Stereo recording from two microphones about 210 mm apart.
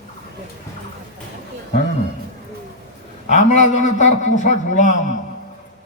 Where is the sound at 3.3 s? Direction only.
35° left (ahead or behind).